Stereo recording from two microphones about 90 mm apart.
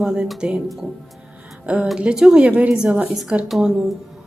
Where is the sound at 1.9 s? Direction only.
10° right (ahead or behind).